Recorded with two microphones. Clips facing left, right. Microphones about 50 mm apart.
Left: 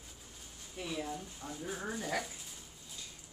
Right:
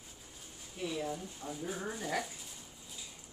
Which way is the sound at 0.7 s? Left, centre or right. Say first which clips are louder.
Right 2 dB; centre.